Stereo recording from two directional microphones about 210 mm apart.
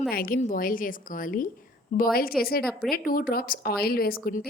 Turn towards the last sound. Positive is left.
turn(degrees=45)  # may be behind; listen again after turning